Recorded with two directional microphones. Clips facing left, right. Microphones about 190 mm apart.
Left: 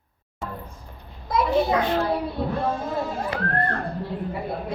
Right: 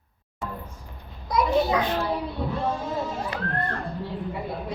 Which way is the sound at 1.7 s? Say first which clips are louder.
Left 3 dB; 35° left (ahead or behind).